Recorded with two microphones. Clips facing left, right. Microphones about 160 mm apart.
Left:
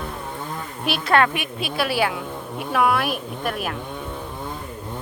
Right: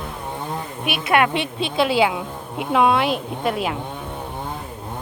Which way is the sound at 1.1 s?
20° right (ahead or behind).